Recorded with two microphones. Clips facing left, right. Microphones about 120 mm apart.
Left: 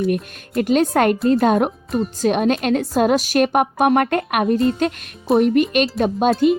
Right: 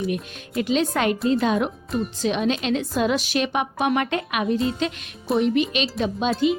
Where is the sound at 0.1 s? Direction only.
50° left (ahead or behind).